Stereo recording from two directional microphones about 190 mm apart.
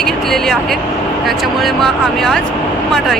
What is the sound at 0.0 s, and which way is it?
Vehicle, centre (ahead or behind).